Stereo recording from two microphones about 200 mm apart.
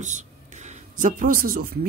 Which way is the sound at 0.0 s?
35° right (ahead or behind).